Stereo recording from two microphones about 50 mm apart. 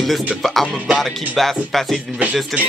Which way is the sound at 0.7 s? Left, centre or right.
Centre.